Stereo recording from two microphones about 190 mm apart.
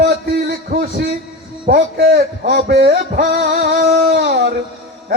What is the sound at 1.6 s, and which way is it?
A man's voice, 50° right (ahead or behind).